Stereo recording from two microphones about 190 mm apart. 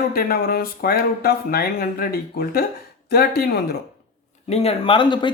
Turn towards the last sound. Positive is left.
turn(degrees=25)  # may be behind; listen again after turning